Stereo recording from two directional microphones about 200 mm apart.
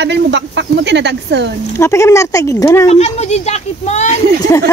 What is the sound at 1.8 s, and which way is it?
Speech, 15° left (ahead or behind).